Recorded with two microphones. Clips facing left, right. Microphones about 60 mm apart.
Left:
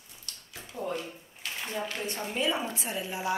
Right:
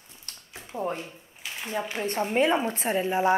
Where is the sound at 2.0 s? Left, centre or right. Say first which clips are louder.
Right 9 dB; right.